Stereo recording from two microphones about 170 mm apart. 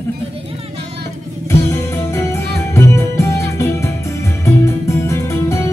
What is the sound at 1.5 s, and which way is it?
Music, 15° left (ahead or behind).